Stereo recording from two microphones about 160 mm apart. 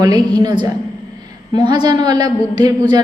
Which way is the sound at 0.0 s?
25° right (ahead or behind).